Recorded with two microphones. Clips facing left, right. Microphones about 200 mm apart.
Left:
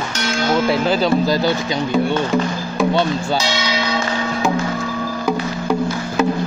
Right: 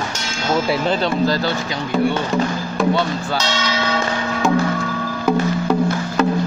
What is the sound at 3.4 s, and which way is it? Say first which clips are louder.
Church bell: left 1 dB; 10° left (ahead or behind).